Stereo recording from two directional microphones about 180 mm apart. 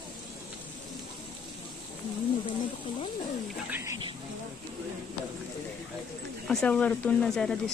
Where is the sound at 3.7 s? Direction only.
15° right (ahead or behind).